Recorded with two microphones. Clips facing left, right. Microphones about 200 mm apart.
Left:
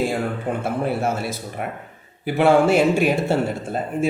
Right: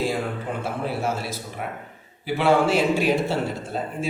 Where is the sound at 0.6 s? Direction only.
55° left (ahead or behind).